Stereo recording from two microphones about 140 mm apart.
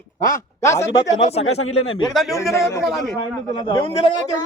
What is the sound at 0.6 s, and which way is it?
Speech, 20° left (ahead or behind).